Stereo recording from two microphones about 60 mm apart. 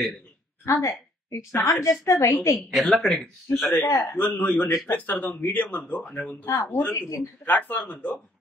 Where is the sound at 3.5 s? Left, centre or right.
Left.